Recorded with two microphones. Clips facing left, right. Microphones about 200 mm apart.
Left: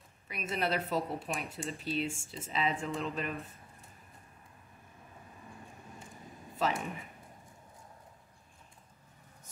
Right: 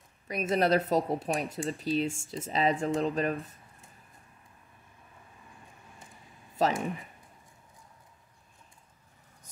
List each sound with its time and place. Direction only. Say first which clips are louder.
0.3 s speech: right 8 dB; 40° right (ahead or behind)
6.6 s speech: right 5 dB; 40° right (ahead or behind)